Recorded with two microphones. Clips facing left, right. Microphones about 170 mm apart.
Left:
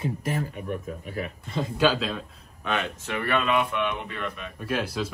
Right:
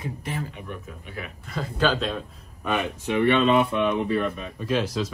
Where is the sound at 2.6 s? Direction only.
15° right (ahead or behind).